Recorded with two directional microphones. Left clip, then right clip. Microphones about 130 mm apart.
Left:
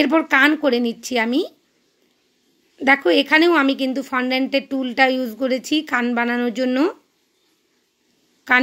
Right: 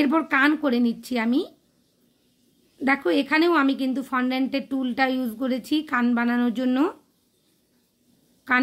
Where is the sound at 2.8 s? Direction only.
30° left (ahead or behind).